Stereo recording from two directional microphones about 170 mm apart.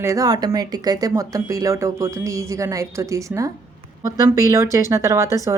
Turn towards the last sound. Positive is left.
turn(degrees=-15)  # may be behind; listen again after turning